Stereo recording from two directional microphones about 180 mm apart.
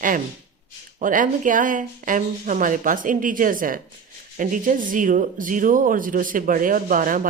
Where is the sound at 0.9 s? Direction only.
45° right (ahead or behind).